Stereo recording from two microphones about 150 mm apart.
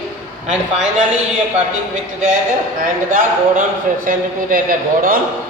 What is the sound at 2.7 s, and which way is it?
A man's voice, 60° right (ahead or behind).